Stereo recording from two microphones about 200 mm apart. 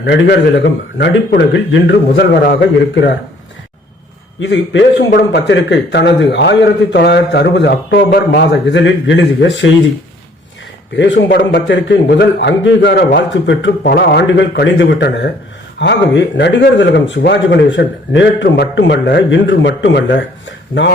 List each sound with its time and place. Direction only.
0.0 s a man's voice: 55° left (ahead or behind)
4.4 s a man's voice: 65° left (ahead or behind)
10.9 s a man's voice: 65° left (ahead or behind)